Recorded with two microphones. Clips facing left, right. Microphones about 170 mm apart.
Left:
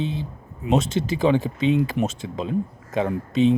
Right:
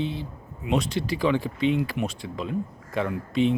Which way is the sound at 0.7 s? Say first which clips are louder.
Left 4 dB; 25° left (ahead or behind).